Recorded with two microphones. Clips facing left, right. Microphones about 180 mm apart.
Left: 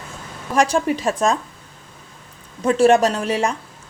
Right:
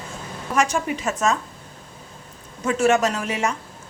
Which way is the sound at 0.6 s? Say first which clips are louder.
Left 4 dB; 35° left (ahead or behind).